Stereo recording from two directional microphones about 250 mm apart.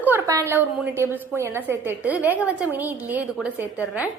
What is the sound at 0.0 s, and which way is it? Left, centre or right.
A woman's voice, centre.